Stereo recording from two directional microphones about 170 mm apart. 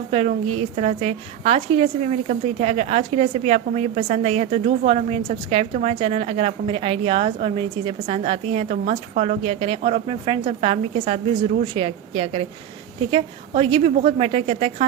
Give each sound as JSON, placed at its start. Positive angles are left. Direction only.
{"t": 0.1, "sound": "a woman's voice", "side_deg": -35}